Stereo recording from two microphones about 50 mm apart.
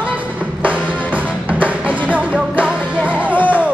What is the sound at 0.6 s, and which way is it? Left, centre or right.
Music, right.